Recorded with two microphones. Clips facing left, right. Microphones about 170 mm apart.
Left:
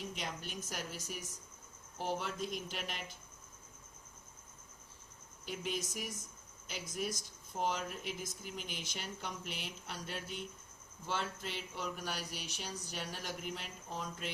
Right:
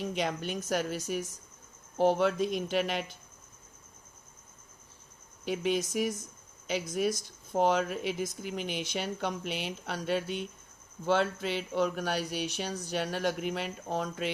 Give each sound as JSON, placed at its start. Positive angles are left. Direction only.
{"t": 0.0, "sound": "speech", "side_deg": -80}
{"t": 5.5, "sound": "speech", "side_deg": -75}